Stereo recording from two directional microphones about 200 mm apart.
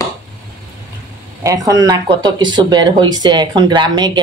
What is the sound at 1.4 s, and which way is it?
Speech, 15° right (ahead or behind).